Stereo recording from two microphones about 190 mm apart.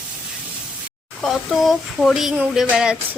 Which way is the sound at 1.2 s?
Centre (ahead or behind).